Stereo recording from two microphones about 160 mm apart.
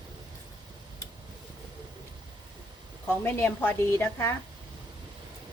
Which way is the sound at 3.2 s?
15° left (ahead or behind).